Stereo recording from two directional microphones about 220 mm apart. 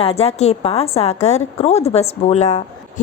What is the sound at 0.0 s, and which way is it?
A woman's voice, 25° left (ahead or behind).